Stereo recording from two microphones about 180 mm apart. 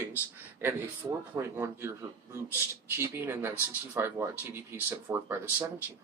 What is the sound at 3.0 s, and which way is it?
Speech, 15° right (ahead or behind).